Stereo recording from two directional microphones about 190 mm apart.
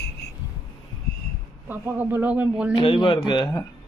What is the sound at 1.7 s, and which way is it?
A woman's voice, 10° right (ahead or behind).